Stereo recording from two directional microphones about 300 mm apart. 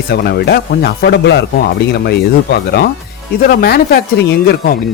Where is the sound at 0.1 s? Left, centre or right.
Left.